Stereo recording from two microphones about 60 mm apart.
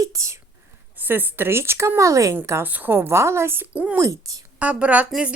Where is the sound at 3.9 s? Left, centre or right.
Right.